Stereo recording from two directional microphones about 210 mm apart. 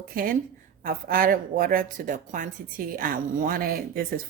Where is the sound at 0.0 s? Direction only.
45° right (ahead or behind).